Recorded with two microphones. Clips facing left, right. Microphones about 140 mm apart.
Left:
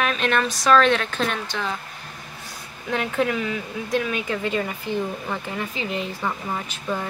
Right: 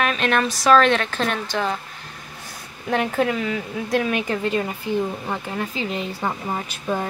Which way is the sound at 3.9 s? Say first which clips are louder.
Right 3 dB; 35° right (ahead or behind).